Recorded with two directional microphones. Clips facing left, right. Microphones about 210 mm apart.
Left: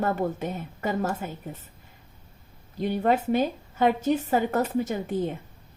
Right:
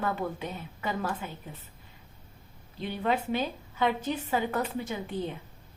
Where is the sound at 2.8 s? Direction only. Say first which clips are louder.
Left 6 dB; 45° left (ahead or behind).